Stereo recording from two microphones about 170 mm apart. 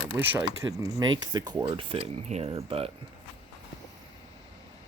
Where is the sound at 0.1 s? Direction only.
15° right (ahead or behind); by 2.9 s 35° right (ahead or behind).